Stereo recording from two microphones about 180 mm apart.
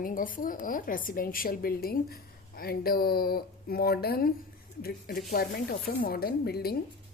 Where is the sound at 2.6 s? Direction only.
55° left (ahead or behind).